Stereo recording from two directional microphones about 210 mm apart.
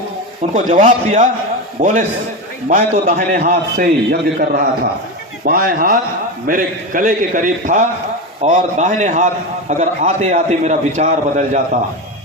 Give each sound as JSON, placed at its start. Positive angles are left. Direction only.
{"t": 0.5, "sound": "a man's voice", "side_deg": -35}